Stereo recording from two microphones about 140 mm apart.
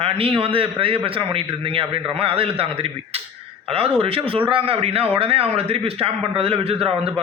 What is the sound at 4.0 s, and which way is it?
A man's voice, 45° right (ahead or behind).